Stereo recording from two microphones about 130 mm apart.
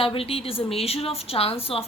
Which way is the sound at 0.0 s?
45° left (ahead or behind).